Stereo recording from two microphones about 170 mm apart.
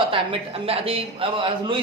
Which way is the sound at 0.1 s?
35° right (ahead or behind).